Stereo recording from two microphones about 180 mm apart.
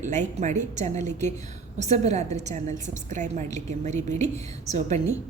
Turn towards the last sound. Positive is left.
turn(degrees=-40)  # may be behind; listen again after turning